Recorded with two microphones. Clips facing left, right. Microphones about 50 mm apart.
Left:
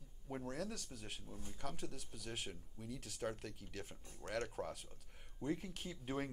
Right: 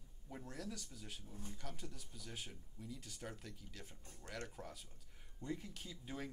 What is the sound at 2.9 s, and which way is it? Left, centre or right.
Speech, left.